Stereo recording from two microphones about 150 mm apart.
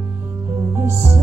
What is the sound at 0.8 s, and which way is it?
Music, 20° right (ahead or behind).